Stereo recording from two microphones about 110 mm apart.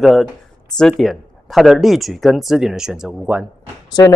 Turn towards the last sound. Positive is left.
turn(degrees=40)  # may be behind; listen again after turning